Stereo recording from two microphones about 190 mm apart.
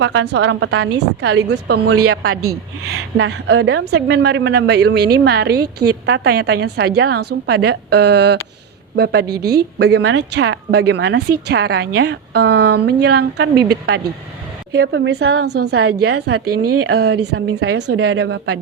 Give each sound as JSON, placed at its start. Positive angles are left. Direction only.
{"t": 0.0, "sound": "a woman's voice", "side_deg": -70}
{"t": 16.9, "sound": "a woman's voice", "side_deg": -75}